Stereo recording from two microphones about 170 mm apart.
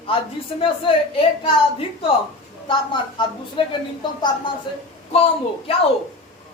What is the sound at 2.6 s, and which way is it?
A child's voice, 25° left (ahead or behind).